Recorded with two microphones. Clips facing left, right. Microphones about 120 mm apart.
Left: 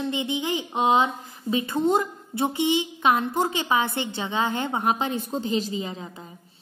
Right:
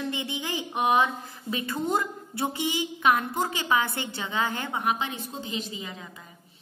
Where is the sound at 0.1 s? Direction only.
20° left (ahead or behind).